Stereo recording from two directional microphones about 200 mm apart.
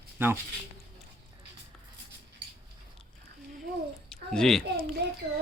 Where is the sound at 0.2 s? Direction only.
10° right (ahead or behind).